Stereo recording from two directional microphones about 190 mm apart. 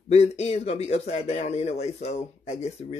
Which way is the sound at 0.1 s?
35° left (ahead or behind).